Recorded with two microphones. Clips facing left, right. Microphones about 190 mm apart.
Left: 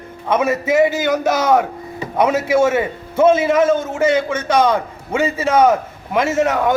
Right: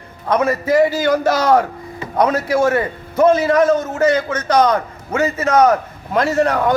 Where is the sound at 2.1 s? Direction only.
5° left (ahead or behind).